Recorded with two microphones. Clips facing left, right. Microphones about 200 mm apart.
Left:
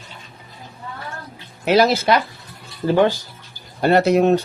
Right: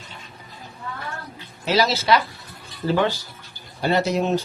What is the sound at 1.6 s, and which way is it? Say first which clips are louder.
Speech: left 5 dB; 55° left (ahead or behind).